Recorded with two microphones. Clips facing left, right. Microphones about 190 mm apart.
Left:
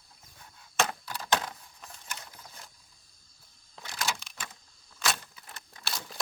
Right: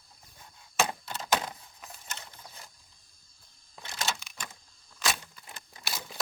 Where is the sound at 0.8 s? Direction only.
25° right (ahead or behind).